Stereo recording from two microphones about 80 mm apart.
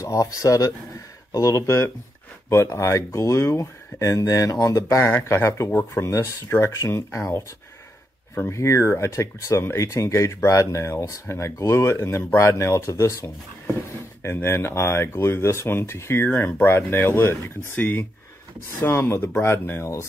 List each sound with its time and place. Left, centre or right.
0.0 s speech: left
8.5 s speech: left